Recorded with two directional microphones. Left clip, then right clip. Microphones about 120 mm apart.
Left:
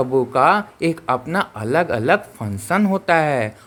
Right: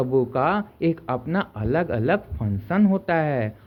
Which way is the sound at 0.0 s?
25° left (ahead or behind).